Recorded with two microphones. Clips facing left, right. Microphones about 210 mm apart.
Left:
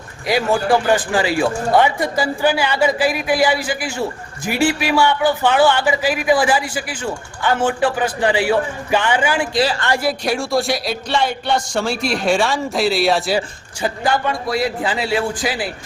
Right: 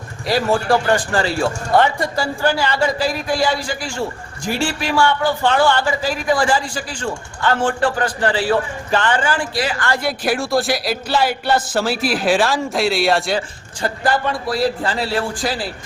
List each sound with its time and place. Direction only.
0.5 s a man's voice: 5° left (ahead or behind)
9.6 s speech: 25° left (ahead or behind)
10.0 s a man's voice: centre (ahead or behind)